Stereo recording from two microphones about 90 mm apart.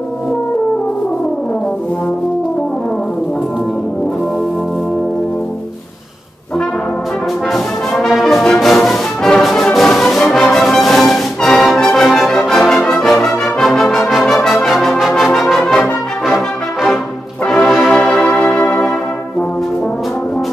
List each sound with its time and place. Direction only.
7.5 s music: centre (ahead or behind)
15.3 s brass instrument: 5° left (ahead or behind)
17.5 s music: centre (ahead or behind)